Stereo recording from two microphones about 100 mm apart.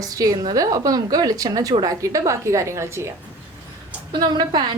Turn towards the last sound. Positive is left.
turn(degrees=-50)  # may be behind; listen again after turning